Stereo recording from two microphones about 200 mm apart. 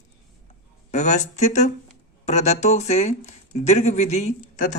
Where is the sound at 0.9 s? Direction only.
35° left (ahead or behind).